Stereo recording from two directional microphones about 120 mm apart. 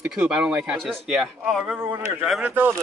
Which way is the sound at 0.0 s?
5° right (ahead or behind).